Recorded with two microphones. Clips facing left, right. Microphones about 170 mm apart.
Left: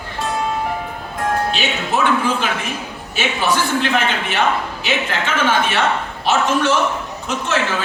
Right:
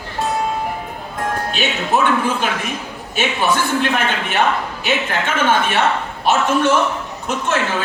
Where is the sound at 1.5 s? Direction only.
50° right (ahead or behind).